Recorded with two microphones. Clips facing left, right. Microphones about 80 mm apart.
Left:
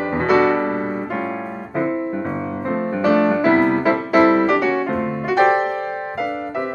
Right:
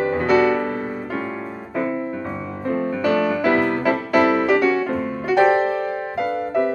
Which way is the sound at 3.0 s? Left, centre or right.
Centre.